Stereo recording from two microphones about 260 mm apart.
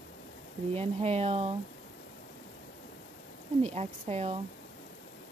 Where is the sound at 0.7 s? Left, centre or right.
Right.